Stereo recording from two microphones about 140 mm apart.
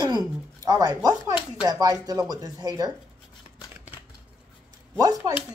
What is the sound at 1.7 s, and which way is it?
A man's voice, 25° right (ahead or behind).